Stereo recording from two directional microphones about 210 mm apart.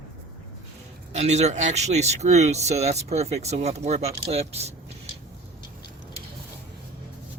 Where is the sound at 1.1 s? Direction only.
30° right (ahead or behind).